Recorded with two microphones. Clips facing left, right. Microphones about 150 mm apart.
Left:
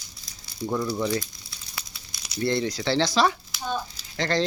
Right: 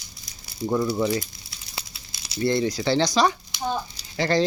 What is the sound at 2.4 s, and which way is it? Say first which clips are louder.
Speech: right 3 dB; centre (ahead or behind).